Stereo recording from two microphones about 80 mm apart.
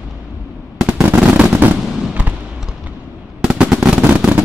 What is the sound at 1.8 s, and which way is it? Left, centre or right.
Fireworks, centre.